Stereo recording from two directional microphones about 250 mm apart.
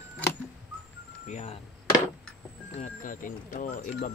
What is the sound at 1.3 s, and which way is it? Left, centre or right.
Speech, left.